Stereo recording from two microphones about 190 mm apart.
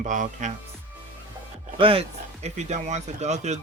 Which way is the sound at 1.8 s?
30° right (ahead or behind).